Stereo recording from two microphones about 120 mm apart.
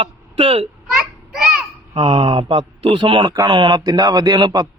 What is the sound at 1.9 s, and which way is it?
A child's voice, 50° right (ahead or behind).